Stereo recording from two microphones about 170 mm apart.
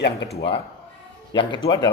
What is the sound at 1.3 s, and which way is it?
Speech, 30° left (ahead or behind).